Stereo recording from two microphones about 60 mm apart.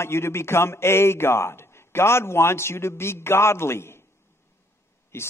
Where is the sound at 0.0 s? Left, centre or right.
Left.